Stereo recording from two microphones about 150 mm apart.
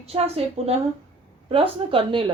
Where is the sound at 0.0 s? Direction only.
40° right (ahead or behind).